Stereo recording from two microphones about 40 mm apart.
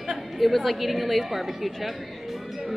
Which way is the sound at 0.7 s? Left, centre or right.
Centre.